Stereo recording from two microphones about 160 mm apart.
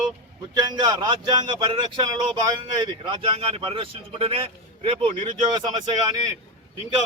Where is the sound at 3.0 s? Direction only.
30° right (ahead or behind).